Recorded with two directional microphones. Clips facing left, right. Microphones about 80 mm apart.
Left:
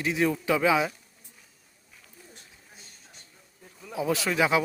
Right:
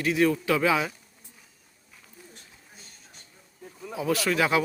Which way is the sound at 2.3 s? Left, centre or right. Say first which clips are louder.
Right 1 dB; centre.